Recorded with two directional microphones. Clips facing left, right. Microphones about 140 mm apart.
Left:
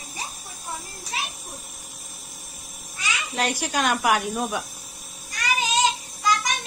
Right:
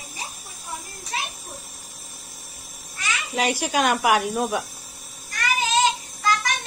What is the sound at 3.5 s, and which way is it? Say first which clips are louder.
Speech: right 2 dB; 10° right (ahead or behind).